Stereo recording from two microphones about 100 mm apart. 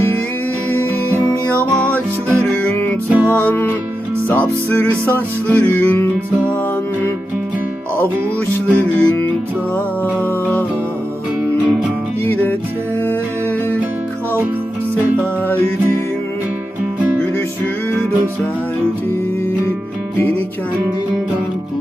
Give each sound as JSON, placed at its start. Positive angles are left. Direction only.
{"t": 1.2, "sound": "music", "side_deg": 10}
{"t": 3.1, "sound": "music", "side_deg": -20}
{"t": 3.4, "sound": "music", "side_deg": 20}
{"t": 9.0, "sound": "music", "side_deg": 20}
{"t": 12.3, "sound": "music", "side_deg": 20}